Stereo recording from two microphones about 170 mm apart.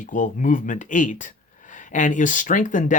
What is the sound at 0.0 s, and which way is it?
Speech, 50° left (ahead or behind).